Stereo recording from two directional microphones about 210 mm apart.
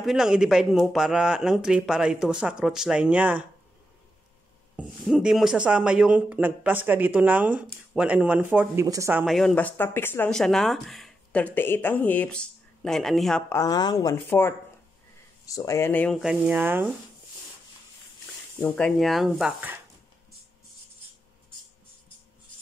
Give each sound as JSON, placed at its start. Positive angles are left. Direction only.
{"t": 0.0, "sound": "speech", "side_deg": 0}
{"t": 4.7, "sound": "speech", "side_deg": -5}
{"t": 9.2, "sound": "speech", "side_deg": 0}
{"t": 13.6, "sound": "speech", "side_deg": 20}
{"t": 18.6, "sound": "speech", "side_deg": 5}